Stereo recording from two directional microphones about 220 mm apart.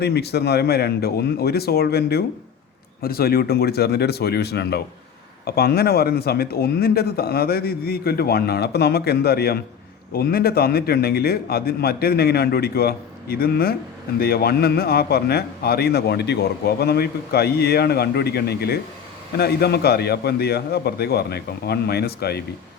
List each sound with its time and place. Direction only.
0.0 s a man's voice: 50° left (ahead or behind)